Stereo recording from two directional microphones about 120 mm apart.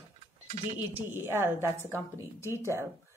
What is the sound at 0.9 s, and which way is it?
A woman's voice, 20° right (ahead or behind).